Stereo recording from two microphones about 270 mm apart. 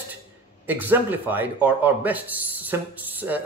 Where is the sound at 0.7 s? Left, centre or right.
Centre.